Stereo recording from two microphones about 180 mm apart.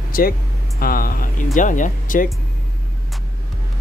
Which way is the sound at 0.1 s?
55° left (ahead or behind).